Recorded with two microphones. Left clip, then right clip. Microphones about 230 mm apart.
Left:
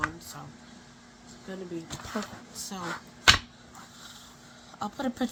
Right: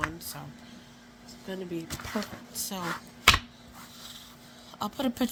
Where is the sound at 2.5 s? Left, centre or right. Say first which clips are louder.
Right 4 dB; right.